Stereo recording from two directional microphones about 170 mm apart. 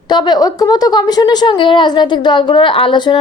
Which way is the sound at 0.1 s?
25° left (ahead or behind).